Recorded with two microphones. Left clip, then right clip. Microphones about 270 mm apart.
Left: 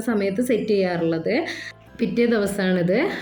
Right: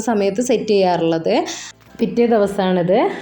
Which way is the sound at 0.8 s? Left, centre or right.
Right.